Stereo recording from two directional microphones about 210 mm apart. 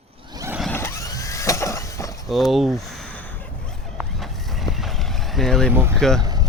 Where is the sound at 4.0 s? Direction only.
Centre (ahead or behind).